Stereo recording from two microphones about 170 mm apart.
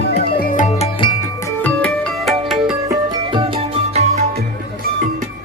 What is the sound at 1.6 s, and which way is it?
Music, 5° left (ahead or behind).